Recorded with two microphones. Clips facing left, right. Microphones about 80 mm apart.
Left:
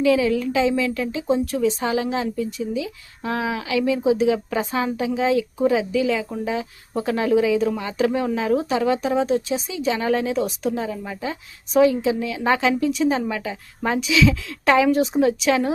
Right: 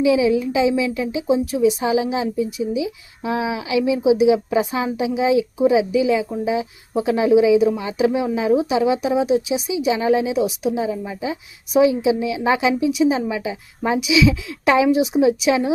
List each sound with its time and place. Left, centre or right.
0.0 s speech: centre
14.9 s speech: centre